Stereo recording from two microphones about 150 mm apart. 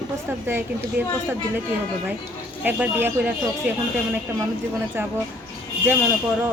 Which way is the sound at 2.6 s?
10° right (ahead or behind).